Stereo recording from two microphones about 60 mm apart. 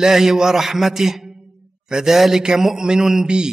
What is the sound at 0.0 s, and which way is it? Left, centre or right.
Mantra, centre.